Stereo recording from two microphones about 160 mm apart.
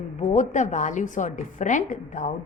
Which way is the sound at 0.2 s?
50° left (ahead or behind).